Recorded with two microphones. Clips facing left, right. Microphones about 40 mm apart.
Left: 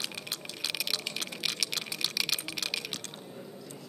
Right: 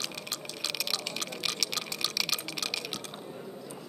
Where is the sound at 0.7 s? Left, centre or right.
Centre.